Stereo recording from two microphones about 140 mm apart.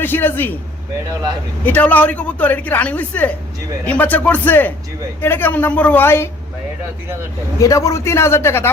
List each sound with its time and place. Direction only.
0.0 s speech: 15° left (ahead or behind)
1.6 s speech: 10° left (ahead or behind)
7.6 s a man's voice: 20° left (ahead or behind)